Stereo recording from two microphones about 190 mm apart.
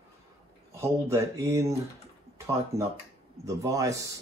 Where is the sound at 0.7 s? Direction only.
15° right (ahead or behind).